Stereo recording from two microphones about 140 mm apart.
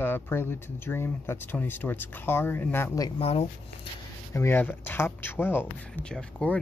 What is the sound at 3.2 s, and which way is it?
Speech, 45° left (ahead or behind).